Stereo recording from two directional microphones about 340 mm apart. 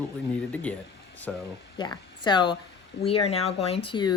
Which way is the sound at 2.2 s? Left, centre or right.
Centre.